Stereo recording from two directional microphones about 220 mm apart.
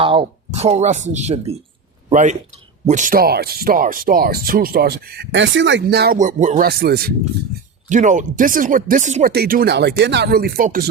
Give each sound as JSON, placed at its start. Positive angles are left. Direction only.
{"t": 0.0, "sound": "speech", "side_deg": -25}